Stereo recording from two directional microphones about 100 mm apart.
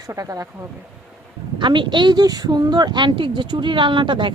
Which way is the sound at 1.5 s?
50° right (ahead or behind).